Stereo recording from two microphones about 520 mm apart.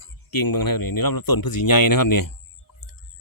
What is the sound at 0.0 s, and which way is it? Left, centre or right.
Speech, left.